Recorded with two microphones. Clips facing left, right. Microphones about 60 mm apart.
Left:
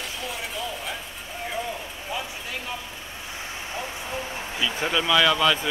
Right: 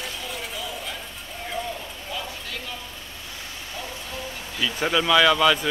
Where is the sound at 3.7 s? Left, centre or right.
Left.